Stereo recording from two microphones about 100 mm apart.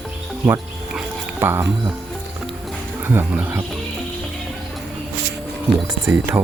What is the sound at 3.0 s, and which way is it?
Speech, 20° right (ahead or behind).